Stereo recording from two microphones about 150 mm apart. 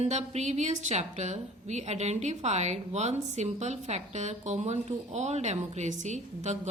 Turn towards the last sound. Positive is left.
turn(degrees=-50)  # may be behind; listen again after turning